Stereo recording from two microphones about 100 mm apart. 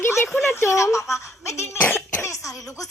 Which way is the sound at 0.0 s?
25° left (ahead or behind).